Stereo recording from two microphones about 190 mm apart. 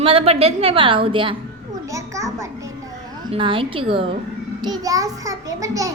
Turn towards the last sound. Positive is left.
turn(degrees=-15)  # may be behind; listen again after turning